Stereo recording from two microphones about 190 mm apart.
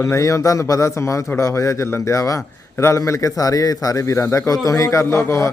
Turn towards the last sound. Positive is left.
turn(degrees=15)  # may be behind; listen again after turning